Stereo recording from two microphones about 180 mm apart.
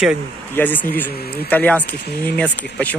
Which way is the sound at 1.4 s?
10° left (ahead or behind).